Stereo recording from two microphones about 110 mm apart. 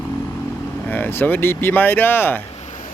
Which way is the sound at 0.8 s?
15° left (ahead or behind).